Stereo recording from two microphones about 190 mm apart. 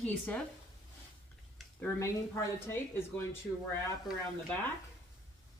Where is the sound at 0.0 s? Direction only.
5° left (ahead or behind).